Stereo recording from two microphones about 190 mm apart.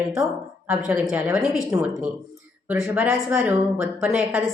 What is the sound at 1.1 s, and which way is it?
Speech, 5° right (ahead or behind).